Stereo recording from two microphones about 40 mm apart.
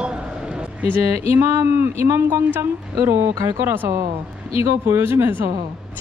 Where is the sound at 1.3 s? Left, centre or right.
Right.